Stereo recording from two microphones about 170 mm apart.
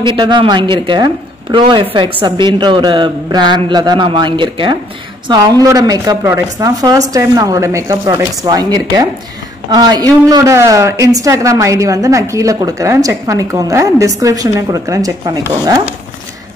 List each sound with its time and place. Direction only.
0.0 s a woman's voice: 25° right (ahead or behind)